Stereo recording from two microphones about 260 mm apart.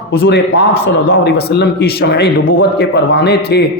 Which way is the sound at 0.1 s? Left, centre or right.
Left.